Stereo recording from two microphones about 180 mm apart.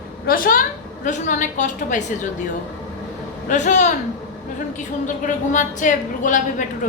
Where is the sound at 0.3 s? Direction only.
50° left (ahead or behind).